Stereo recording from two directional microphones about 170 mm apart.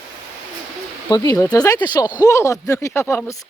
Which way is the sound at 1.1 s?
20° left (ahead or behind).